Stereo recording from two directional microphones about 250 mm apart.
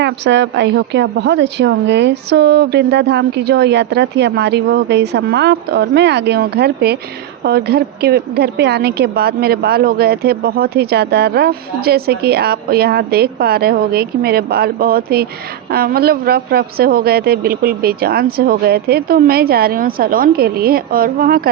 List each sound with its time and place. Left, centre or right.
0.0 s a woman's voice: right